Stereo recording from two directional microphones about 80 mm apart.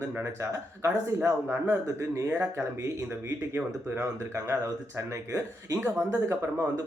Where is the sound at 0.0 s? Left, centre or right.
Right.